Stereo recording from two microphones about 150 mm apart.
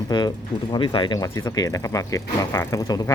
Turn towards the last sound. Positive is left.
turn(degrees=25)  # may be behind; listen again after turning